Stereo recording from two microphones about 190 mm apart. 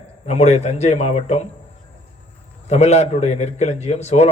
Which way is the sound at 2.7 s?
35° left (ahead or behind).